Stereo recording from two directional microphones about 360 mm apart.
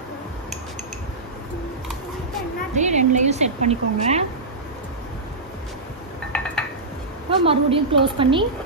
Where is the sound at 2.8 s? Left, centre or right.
Centre.